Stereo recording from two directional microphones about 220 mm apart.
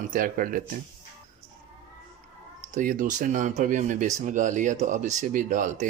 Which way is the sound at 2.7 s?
35° right (ahead or behind).